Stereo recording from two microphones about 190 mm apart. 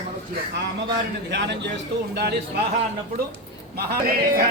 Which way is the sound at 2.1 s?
60° right (ahead or behind).